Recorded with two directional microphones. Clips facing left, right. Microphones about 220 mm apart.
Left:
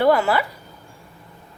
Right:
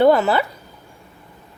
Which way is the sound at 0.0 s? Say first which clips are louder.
Right 3 dB; 20° right (ahead or behind).